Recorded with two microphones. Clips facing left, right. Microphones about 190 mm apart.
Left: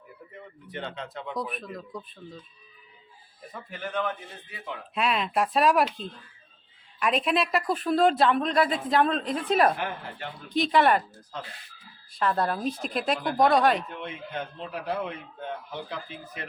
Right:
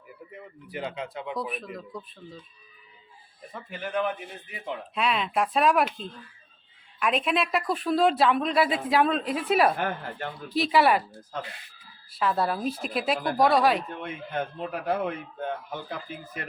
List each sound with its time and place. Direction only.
0.7 s speech: 5° right (ahead or behind)
3.5 s speech: 5° right (ahead or behind)
4.5 s speech: 25° right (ahead or behind)
4.9 s speech: centre (ahead or behind)
7.0 s speech: centre (ahead or behind)
9.7 s speech: 45° right (ahead or behind)
10.5 s speech: 5° right (ahead or behind)
11.3 s speech: 50° right (ahead or behind)
12.1 s speech: 5° right (ahead or behind)
14.7 s speech: 50° right (ahead or behind)